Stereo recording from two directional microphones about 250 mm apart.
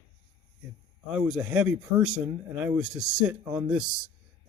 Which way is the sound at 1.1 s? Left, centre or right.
Centre.